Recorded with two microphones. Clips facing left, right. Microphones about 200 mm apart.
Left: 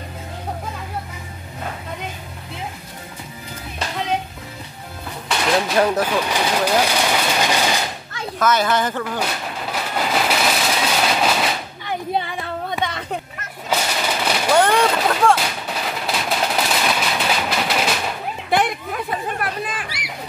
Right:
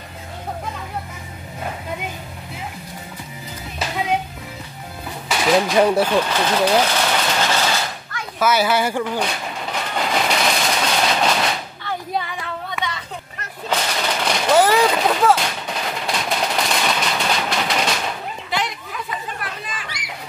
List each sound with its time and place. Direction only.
5.4 s speech: centre (ahead or behind)
6.2 s a sound: 10° left (ahead or behind)
8.4 s speech: 10° right (ahead or behind)
9.2 s vehicle: 5° left (ahead or behind)
11.9 s female singing: 25° left (ahead or behind)
12.8 s a sound: 55° left (ahead or behind)
13.7 s a sound: 5° left (ahead or behind)
14.5 s artillery fire: 5° right (ahead or behind)
18.5 s chatter: 55° left (ahead or behind)